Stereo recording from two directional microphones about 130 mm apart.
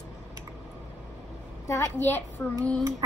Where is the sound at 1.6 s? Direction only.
20° left (ahead or behind).